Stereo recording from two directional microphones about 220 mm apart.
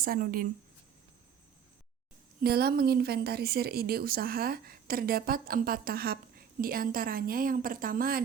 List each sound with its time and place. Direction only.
0.0 s speech: 40° right (ahead or behind)
2.4 s speech: 45° right (ahead or behind)